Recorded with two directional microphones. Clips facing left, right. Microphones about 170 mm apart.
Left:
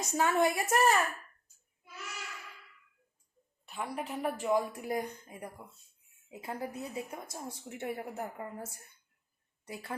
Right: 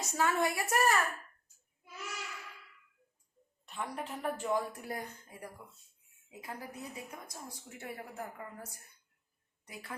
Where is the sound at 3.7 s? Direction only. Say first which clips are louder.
Left 2 dB; 10° left (ahead or behind).